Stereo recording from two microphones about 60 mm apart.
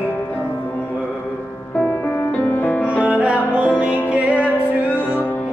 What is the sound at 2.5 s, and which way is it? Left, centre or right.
Music, left.